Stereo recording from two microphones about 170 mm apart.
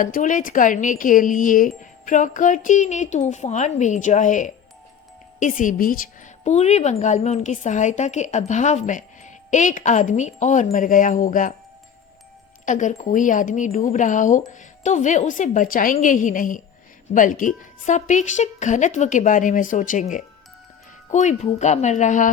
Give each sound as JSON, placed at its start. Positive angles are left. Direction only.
{"t": 0.0, "sound": "a woman's voice", "side_deg": 50}
{"t": 12.6, "sound": "a woman's voice", "side_deg": 45}